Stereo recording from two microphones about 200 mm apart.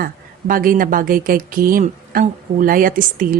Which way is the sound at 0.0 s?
45° right (ahead or behind).